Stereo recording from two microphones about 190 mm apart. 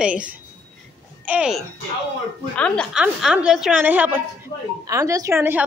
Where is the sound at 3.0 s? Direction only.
5° right (ahead or behind).